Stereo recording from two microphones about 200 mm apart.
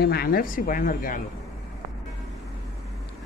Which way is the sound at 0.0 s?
50° left (ahead or behind).